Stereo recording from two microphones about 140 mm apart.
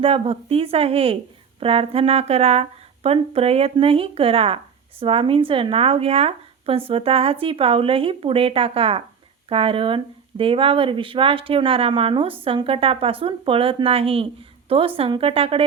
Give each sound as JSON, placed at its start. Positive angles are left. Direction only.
{"t": 0.0, "sound": "speech", "side_deg": -40}